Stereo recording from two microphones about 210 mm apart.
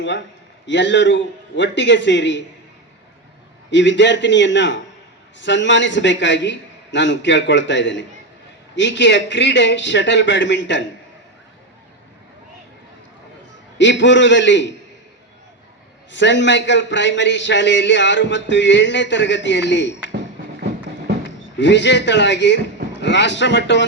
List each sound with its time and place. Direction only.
0.6 s a man's voice: 60° left (ahead or behind)
3.7 s a man's voice: 60° left (ahead or behind)
13.7 s a man's voice: 60° left (ahead or behind)
16.1 s a man's voice: 60° left (ahead or behind)
21.2 s speech: 55° left (ahead or behind)